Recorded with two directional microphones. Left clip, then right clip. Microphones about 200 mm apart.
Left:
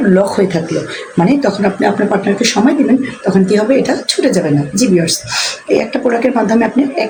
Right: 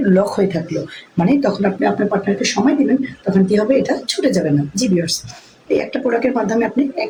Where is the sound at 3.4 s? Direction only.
15° left (ahead or behind).